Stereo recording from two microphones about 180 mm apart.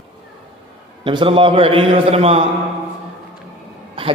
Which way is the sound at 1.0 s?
30° right (ahead or behind).